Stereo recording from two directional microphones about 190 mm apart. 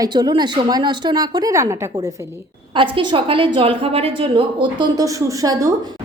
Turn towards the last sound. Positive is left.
turn(degrees=-20)  # may be behind; listen again after turning